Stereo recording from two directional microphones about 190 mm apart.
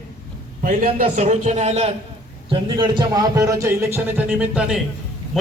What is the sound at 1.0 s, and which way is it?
Speech, 40° right (ahead or behind).